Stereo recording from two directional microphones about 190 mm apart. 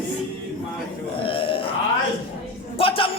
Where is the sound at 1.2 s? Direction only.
30° left (ahead or behind).